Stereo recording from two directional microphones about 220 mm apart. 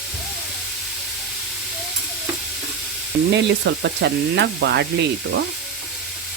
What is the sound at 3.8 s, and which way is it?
Frying, 50° right (ahead or behind).